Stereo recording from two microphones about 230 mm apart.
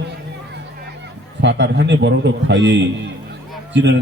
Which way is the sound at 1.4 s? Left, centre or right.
Right.